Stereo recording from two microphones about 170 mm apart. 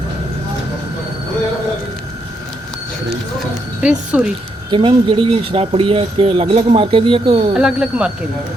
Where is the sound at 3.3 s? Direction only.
5° right (ahead or behind).